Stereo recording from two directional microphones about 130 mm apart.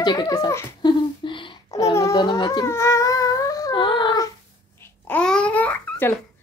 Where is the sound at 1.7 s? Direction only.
25° left (ahead or behind).